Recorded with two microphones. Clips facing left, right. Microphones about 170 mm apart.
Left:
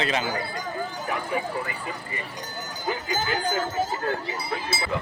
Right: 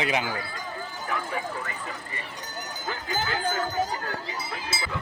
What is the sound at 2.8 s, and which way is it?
Jingle bell, 15° left (ahead or behind).